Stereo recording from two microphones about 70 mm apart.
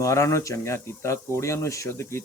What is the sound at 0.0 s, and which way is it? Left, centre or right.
Speech, left.